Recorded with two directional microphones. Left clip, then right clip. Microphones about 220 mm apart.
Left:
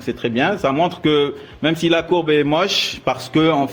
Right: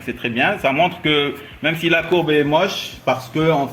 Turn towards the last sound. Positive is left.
turn(degrees=45)  # may be behind; listen again after turning